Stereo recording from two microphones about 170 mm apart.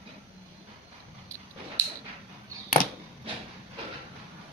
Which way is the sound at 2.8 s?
55° left (ahead or behind).